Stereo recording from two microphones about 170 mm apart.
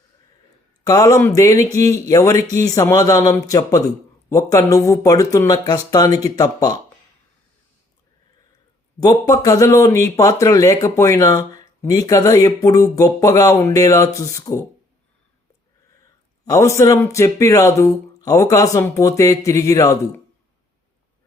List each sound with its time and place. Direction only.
0.9 s speech: 20° left (ahead or behind)
9.0 s speech: 20° left (ahead or behind)
16.5 s speech: 15° left (ahead or behind)